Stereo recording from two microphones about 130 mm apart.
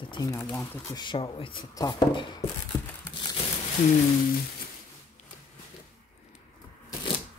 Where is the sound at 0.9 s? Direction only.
35° left (ahead or behind).